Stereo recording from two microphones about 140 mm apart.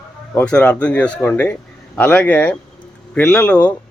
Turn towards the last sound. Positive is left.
turn(degrees=10)  # may be behind; listen again after turning